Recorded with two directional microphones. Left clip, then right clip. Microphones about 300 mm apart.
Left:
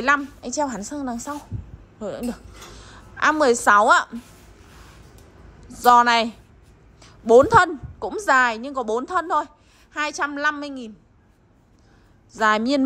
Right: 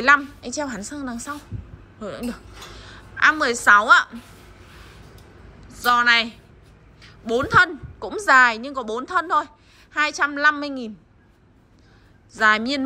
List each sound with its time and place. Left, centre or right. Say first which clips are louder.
0.0 s a woman's voice: right 4 dB; centre
5.7 s a woman's voice: left 2 dB; centre
7.4 s a woman's voice: left 1 dB; centre
12.3 s a woman's voice: right 1 dB; centre